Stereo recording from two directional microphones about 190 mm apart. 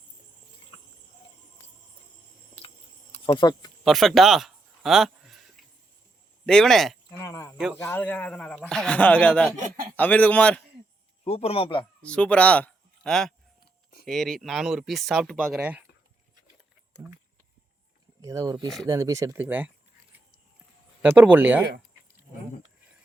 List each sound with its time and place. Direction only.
2.6 s insect: 35° left (ahead or behind)
3.8 s speech: centre (ahead or behind)
5.6 s music: centre (ahead or behind)
6.4 s speech: 5° left (ahead or behind)
7.2 s cricket: 15° left (ahead or behind)
7.8 s speech: 10° left (ahead or behind)
9.6 s speech: 50° right (ahead or behind)
9.9 s speech: 10° left (ahead or behind)
11.2 s a man's voice: 30° left (ahead or behind)
12.0 s speech: 5° left (ahead or behind)
18.2 s speech: 15° right (ahead or behind)
21.0 s speech: 10° right (ahead or behind)